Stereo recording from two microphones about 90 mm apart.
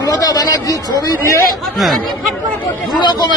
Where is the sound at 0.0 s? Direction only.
40° left (ahead or behind).